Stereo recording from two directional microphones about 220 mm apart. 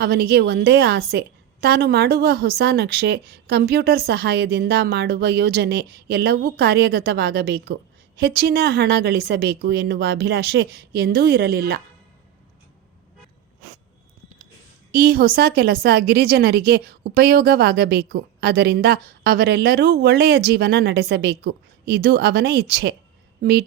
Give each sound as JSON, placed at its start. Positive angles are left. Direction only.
{"t": 0.0, "sound": "a woman's voice", "side_deg": -45}
{"t": 14.9, "sound": "a woman's voice", "side_deg": -45}